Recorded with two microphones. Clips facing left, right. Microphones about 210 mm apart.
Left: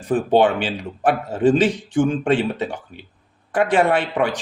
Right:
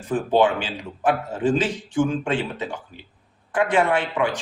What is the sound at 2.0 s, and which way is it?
Speech, 55° left (ahead or behind).